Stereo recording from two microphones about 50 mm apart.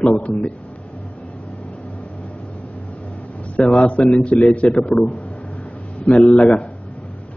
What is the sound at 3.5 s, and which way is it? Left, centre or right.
A man's voice, left.